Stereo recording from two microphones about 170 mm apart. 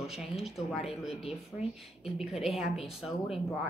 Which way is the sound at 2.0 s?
Centre (ahead or behind).